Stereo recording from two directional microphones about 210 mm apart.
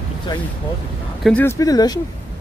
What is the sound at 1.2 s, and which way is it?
Speech, 10° left (ahead or behind).